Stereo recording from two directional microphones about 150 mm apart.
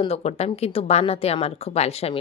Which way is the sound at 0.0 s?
45° left (ahead or behind).